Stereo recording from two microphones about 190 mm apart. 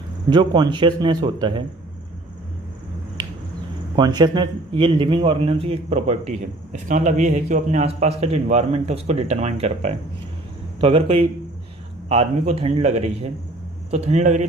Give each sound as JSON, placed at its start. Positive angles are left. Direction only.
{"t": 0.3, "sound": "speech", "side_deg": -25}
{"t": 3.9, "sound": "a man's voice", "side_deg": -20}